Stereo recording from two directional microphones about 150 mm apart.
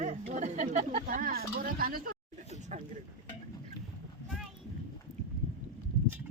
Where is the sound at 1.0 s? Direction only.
70° right (ahead or behind).